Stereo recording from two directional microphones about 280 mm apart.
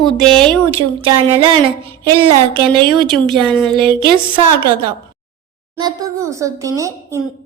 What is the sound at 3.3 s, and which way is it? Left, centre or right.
Speech, centre.